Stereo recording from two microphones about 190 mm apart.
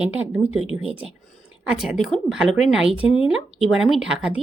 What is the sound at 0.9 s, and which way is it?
Speech, 30° right (ahead or behind).